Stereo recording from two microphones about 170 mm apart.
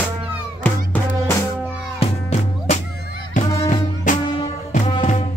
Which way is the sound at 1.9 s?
40° left (ahead or behind).